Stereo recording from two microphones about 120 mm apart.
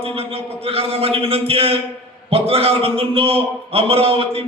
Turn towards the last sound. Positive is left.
turn(degrees=-50)  # may be behind; listen again after turning